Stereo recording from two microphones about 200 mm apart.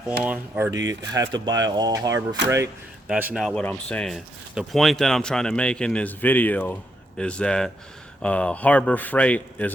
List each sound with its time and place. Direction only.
0.2 s speech: 5° right (ahead or behind)
3.1 s speech: 5° right (ahead or behind)
3.4 s speech: 5° left (ahead or behind)